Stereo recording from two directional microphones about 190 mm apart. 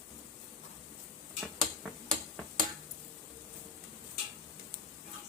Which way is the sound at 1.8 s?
Centre (ahead or behind).